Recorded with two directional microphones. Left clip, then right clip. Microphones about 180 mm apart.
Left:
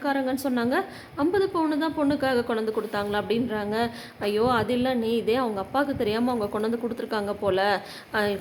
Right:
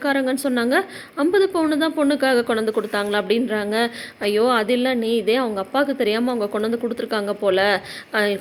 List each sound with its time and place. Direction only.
0.0 s a woman's voice: 20° right (ahead or behind)